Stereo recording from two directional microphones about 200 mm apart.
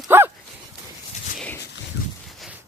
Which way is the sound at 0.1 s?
10° right (ahead or behind).